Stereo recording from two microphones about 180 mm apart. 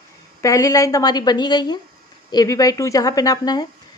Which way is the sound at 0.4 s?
20° left (ahead or behind).